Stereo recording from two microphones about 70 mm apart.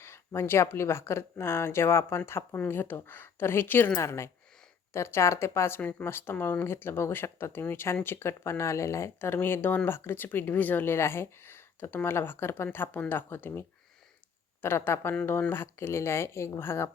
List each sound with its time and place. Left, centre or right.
0.0 s speech: left
4.0 s speech: left